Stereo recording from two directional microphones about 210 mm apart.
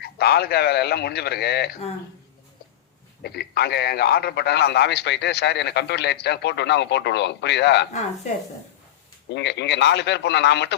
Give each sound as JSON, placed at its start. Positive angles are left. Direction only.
{"t": 0.0, "sound": "a man's voice", "side_deg": 50}
{"t": 3.2, "sound": "a man's voice", "side_deg": 50}
{"t": 9.3, "sound": "speech", "side_deg": 55}